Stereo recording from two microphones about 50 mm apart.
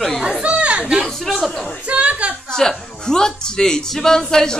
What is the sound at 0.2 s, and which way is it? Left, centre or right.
Chatter, right.